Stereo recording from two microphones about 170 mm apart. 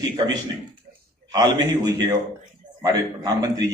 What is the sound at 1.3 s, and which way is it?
A man's voice, 20° right (ahead or behind).